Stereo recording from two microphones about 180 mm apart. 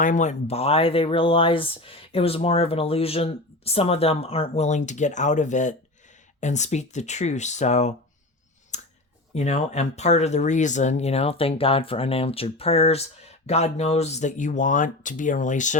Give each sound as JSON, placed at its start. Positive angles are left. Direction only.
{"t": 0.0, "sound": "speech", "side_deg": 45}
{"t": 8.7, "sound": "a sound", "side_deg": 40}
{"t": 9.3, "sound": "speech", "side_deg": 40}